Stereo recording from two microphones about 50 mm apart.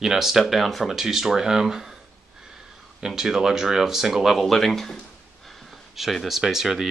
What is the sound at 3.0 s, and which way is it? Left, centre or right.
Speech, centre.